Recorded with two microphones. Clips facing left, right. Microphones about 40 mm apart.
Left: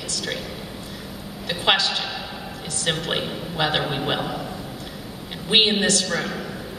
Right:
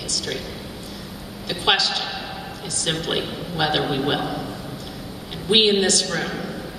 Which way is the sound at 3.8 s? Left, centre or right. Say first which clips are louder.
Right 3 dB; centre.